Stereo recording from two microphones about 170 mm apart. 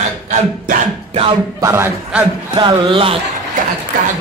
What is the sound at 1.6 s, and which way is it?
A man's voice, 15° right (ahead or behind).